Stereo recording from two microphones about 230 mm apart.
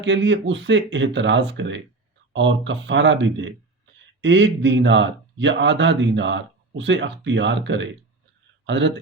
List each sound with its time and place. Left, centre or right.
0.0 s a man's voice: right